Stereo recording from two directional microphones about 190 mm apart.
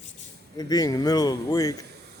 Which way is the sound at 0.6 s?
20° left (ahead or behind).